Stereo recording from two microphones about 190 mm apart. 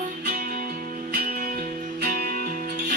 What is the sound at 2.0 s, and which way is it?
Music, 50° right (ahead or behind).